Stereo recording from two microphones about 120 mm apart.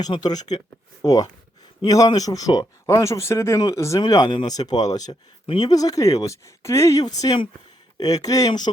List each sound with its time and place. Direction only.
0.0 s speech: 35° left (ahead or behind)
4.0 s speech: 35° left (ahead or behind)